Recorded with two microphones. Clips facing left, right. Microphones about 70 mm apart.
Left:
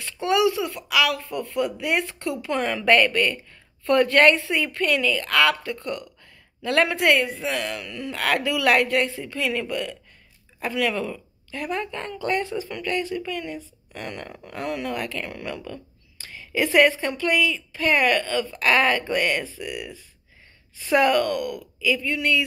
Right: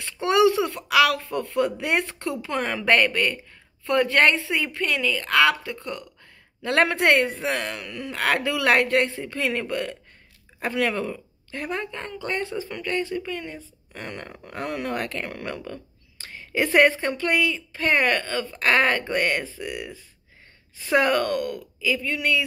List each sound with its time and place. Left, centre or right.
0.2 s a woman's voice: right
6.6 s a woman's voice: right
21.7 s speech: centre